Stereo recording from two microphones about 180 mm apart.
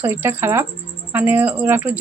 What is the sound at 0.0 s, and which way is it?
A woman's voice, 10° right (ahead or behind).